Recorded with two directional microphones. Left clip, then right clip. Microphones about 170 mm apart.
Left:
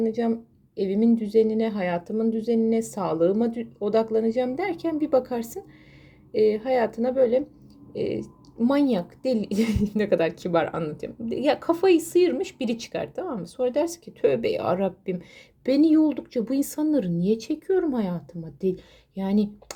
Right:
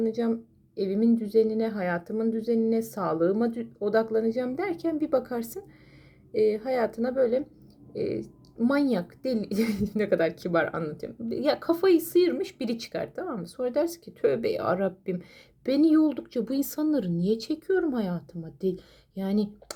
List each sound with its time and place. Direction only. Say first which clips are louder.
0.8 s speech: left 3 dB; 5° left (ahead or behind)
17.2 s speech: left 3 dB; 35° left (ahead or behind)
17.8 s speech: left 2 dB; 5° left (ahead or behind)